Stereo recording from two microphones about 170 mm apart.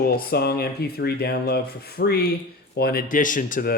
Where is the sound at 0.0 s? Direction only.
65° left (ahead or behind).